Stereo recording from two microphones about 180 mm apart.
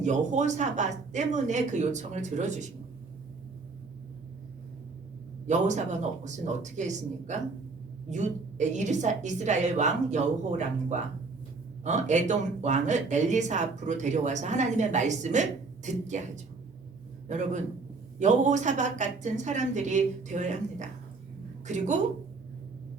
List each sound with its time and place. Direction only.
0.0 s speech: 40° right (ahead or behind)
5.5 s a man's voice: 40° right (ahead or behind)